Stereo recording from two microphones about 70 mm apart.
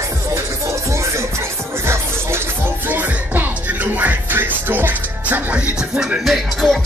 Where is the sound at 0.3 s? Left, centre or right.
Right.